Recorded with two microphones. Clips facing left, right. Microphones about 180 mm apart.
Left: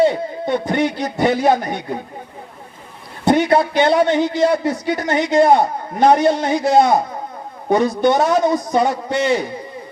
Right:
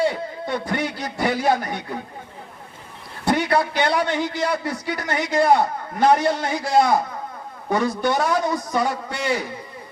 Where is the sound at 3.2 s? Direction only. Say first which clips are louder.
Left 6 dB; 20° left (ahead or behind).